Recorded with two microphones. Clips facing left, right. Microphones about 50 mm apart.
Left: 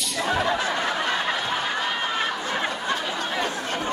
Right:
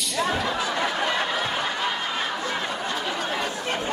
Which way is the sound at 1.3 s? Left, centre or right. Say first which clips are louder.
Even; centre.